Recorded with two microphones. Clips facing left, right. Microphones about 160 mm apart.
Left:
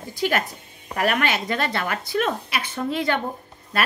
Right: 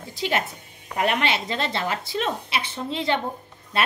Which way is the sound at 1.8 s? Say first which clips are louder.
Left 2 dB; 55° left (ahead or behind).